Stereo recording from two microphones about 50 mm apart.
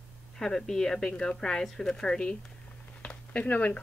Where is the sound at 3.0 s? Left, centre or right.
Left.